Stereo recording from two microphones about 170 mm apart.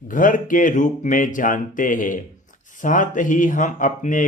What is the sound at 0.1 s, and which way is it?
Speech, 50° left (ahead or behind).